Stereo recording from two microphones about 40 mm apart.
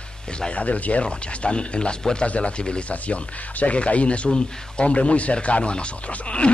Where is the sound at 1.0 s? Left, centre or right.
Left.